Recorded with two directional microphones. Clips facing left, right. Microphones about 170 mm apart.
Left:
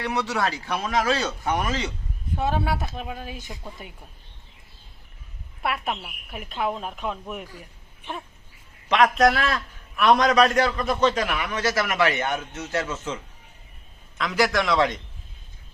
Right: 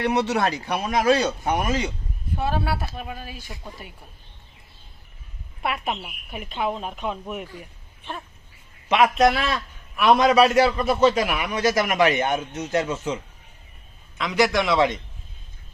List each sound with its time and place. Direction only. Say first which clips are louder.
0.0 s a man's voice: right 4 dB; 20° right (ahead or behind)
2.8 s speech: left 1 dB; 20° left (ahead or behind)
5.6 s speech: right 1 dB; centre (ahead or behind)
8.9 s a man's voice: right 1 dB; 5° right (ahead or behind)
14.2 s speech: right 2 dB; centre (ahead or behind)